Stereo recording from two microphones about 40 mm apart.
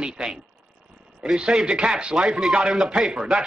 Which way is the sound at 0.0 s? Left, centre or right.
Right.